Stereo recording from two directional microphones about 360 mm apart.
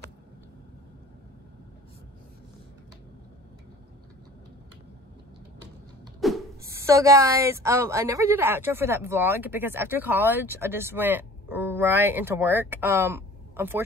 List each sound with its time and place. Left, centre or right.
6.2 s speech: centre